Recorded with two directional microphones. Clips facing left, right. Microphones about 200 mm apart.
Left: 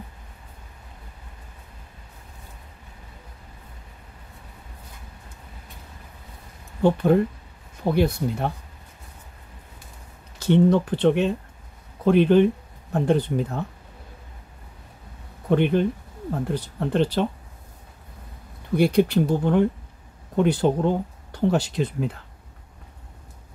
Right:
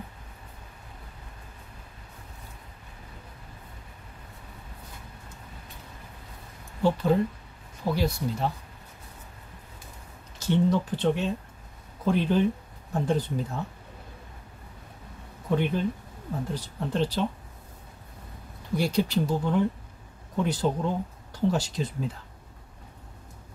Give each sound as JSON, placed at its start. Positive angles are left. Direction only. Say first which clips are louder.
{"t": 6.8, "sound": "speech", "louder": "left 5 dB", "side_deg": 55}
{"t": 10.4, "sound": "speech", "louder": "left 6 dB", "side_deg": 60}
{"t": 15.5, "sound": "speech", "louder": "left 6 dB", "side_deg": 65}
{"t": 18.8, "sound": "speech", "louder": "left 7 dB", "side_deg": 60}